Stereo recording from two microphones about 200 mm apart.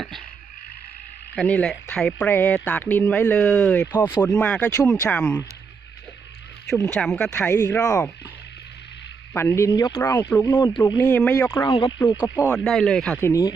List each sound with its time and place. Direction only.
1.4 s speech: 5° left (ahead or behind)
6.9 s speech: 5° left (ahead or behind)
9.3 s speech: 10° left (ahead or behind)
11.0 s speech: 10° left (ahead or behind)
12.5 s speech: 5° left (ahead or behind)
13.2 s speech: 15° left (ahead or behind)